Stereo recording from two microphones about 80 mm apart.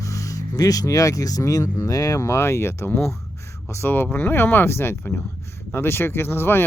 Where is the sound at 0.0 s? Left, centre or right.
Left.